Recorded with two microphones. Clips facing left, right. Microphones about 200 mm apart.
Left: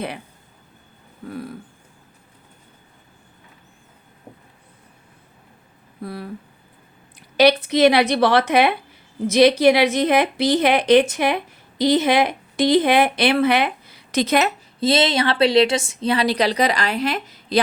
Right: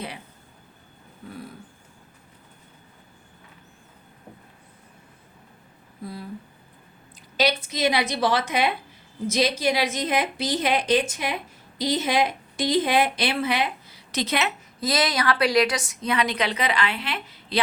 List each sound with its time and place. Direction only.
6.0 s speech: 65° left (ahead or behind)
7.3 s a woman's voice: 65° left (ahead or behind); by 14.5 s 45° left (ahead or behind)
14.8 s a woman's voice: 25° left (ahead or behind); by 17.6 s 40° left (ahead or behind)